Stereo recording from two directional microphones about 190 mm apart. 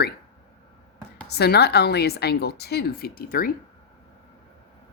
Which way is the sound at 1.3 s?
55° left (ahead or behind).